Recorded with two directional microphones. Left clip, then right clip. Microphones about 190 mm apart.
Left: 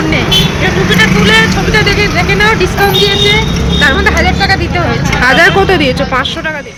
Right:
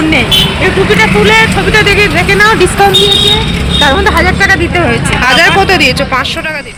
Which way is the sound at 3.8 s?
50° right (ahead or behind).